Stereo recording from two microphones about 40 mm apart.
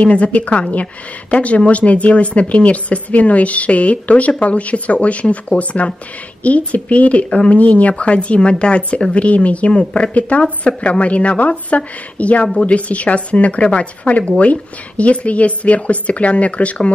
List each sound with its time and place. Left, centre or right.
0.0 s speech: left
7.2 s speech: left
7.5 s speech: left